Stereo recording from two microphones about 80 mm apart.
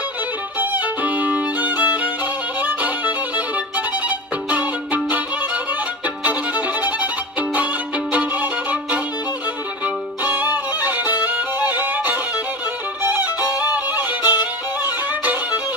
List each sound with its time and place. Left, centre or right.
0.6 s violin: centre
4.5 s music: centre
8.1 s violin: centre
10.2 s music: right
14.2 s music: left